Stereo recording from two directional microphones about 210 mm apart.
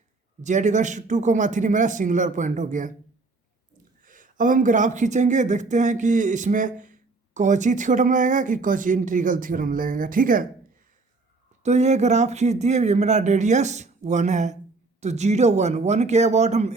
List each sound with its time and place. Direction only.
0.4 s speech: 35° right (ahead or behind)
4.0 s speech: 40° right (ahead or behind)
11.6 s speech: 35° right (ahead or behind)